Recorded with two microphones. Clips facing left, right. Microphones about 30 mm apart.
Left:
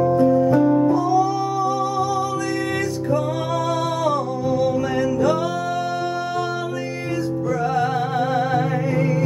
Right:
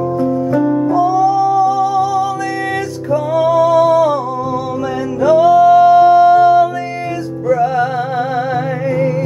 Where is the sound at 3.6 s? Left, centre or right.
Centre.